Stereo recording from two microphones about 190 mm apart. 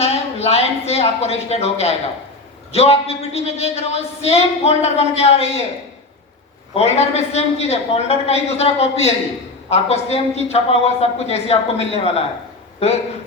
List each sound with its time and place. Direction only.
0.0 s a man's voice: 35° left (ahead or behind)
6.7 s a man's voice: 35° left (ahead or behind)